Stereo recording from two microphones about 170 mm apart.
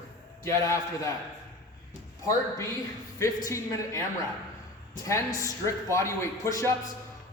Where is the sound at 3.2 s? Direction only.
20° left (ahead or behind).